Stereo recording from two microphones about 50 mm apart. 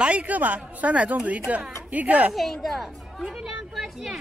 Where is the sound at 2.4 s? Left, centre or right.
Centre.